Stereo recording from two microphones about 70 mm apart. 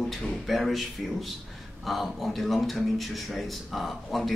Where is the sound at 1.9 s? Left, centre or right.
Centre.